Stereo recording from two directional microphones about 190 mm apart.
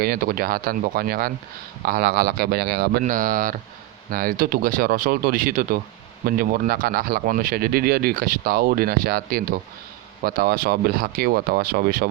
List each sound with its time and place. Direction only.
0.0 s speech: 50° right (ahead or behind)